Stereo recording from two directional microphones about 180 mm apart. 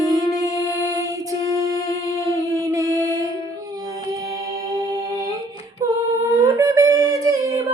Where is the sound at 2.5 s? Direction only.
15° right (ahead or behind).